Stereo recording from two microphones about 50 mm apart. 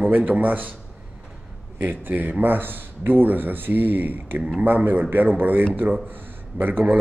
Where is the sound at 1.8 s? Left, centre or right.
Right.